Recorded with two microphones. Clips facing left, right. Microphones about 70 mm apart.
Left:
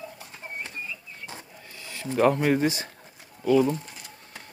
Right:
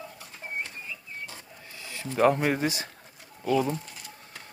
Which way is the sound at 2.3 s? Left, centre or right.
Centre.